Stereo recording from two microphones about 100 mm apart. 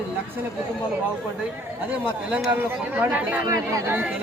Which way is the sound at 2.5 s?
20° right (ahead or behind).